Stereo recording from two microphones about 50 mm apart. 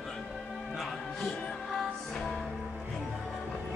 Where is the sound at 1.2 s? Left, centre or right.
Centre.